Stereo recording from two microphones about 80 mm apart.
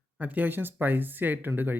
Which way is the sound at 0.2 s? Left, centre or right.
Right.